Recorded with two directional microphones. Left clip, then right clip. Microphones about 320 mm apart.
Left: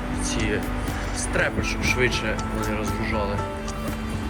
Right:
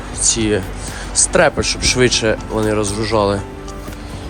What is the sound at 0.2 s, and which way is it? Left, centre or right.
Speech, centre.